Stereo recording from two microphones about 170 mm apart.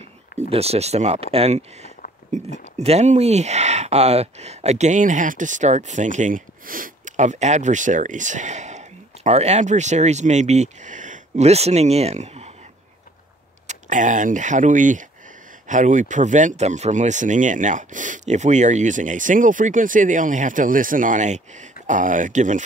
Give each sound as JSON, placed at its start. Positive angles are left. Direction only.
{"t": 0.5, "sound": "speech", "side_deg": -35}
{"t": 13.7, "sound": "speech", "side_deg": -50}